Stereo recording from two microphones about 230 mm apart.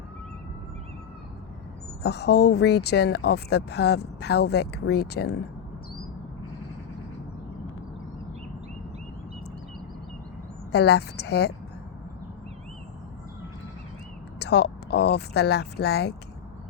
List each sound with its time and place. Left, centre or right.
2.0 s speech: left
10.7 s speech: left
14.3 s speech: left